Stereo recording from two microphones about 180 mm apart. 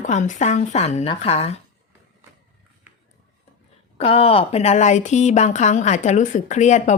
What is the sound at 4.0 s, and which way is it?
Speech, 30° left (ahead or behind).